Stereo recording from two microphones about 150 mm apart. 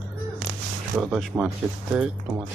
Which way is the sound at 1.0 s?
Centre (ahead or behind).